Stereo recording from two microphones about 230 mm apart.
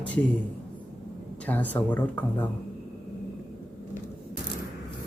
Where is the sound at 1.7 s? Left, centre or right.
Centre.